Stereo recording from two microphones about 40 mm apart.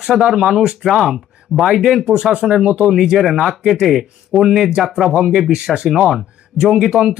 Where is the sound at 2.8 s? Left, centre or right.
Centre.